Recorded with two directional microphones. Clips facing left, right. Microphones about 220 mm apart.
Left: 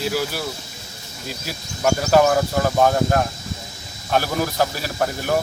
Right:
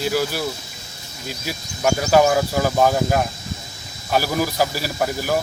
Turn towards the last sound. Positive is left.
turn(degrees=-5)  # may be behind; listen again after turning